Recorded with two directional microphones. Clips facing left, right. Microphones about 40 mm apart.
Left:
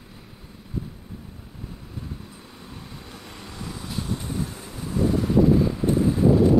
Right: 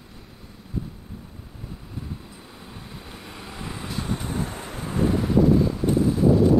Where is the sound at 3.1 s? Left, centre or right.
Centre.